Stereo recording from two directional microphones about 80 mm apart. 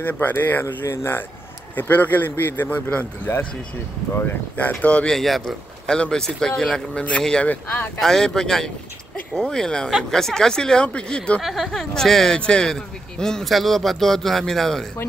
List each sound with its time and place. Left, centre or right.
0.0 s a man's voice: left
5.1 s speech: centre; by 7.9 s left
8.0 s speech: centre
11.4 s speech: centre